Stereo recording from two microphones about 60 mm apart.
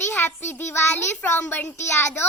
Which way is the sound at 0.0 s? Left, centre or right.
Left.